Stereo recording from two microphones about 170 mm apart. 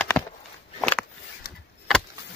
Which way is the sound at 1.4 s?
65° left (ahead or behind).